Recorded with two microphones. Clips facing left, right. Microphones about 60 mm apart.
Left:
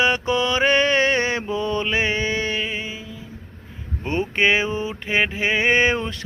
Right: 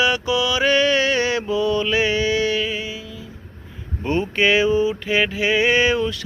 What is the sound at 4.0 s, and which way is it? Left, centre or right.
Mantra, left.